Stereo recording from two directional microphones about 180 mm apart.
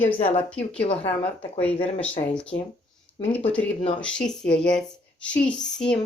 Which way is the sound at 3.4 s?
10° left (ahead or behind).